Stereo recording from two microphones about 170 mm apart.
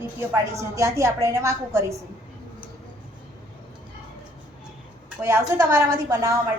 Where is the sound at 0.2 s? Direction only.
15° right (ahead or behind).